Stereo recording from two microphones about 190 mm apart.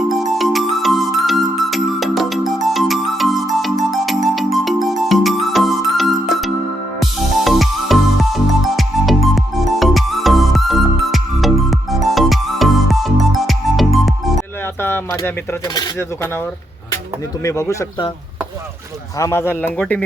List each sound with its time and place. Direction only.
0.2 s music: centre (ahead or behind)
14.8 s a sound: 10° left (ahead or behind)
15.7 s speech: 15° left (ahead or behind)
17.4 s speech: 15° left (ahead or behind)
19.2 s speech: 10° left (ahead or behind)